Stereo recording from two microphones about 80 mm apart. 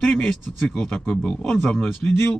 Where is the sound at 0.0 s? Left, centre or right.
Centre.